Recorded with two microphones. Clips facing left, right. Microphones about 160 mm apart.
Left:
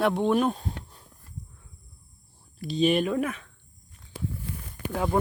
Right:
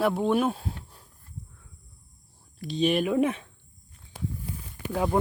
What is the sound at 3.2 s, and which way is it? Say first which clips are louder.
Speech: right 5 dB; 30° right (ahead or behind).